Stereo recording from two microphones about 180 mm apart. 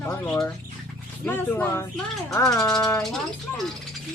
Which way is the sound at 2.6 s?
5° left (ahead or behind).